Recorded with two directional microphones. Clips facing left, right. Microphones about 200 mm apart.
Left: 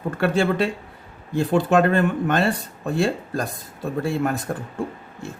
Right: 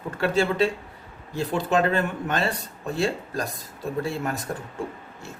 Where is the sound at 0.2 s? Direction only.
55° left (ahead or behind).